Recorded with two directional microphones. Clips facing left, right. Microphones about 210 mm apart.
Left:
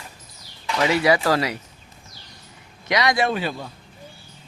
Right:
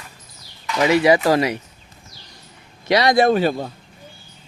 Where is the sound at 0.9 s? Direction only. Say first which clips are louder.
Right 5 dB; 20° right (ahead or behind).